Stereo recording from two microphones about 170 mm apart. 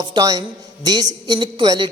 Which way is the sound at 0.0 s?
25° right (ahead or behind).